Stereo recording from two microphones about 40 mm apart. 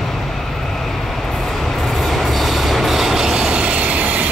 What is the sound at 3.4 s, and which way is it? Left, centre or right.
Train, right.